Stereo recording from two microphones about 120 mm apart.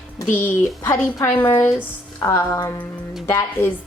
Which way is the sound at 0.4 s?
20° left (ahead or behind).